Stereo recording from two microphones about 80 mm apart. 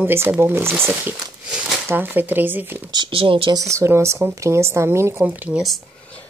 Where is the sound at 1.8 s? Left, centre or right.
Right.